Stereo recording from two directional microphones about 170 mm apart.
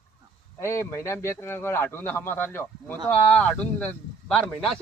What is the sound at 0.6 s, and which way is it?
Speech, 15° left (ahead or behind).